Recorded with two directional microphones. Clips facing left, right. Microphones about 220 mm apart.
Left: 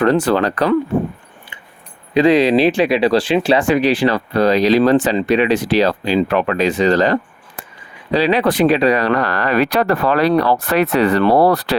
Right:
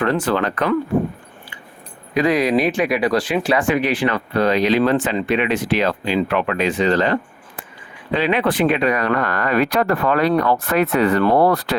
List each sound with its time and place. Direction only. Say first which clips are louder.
0.0 s speech: left 5 dB; 35° left (ahead or behind)
2.1 s speech: left 5 dB; 30° left (ahead or behind)
9.4 s speech: left 2 dB; 75° left (ahead or behind)
10.3 s speech: left 3 dB; 35° left (ahead or behind)
10.7 s speech: left 1 dB; 75° left (ahead or behind)
11.2 s speech: left 3 dB; 35° left (ahead or behind)